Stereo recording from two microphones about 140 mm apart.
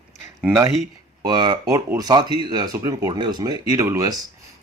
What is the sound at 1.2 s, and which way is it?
Speech, 30° right (ahead or behind).